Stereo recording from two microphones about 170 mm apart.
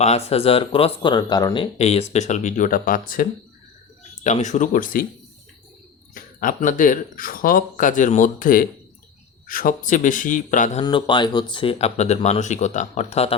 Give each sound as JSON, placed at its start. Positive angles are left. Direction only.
{"t": 0.3, "sound": "speech", "side_deg": 35}
{"t": 1.8, "sound": "speech", "side_deg": 40}
{"t": 4.2, "sound": "speech", "side_deg": 45}
{"t": 6.1, "sound": "speech", "side_deg": 55}
{"t": 10.8, "sound": "speech", "side_deg": 25}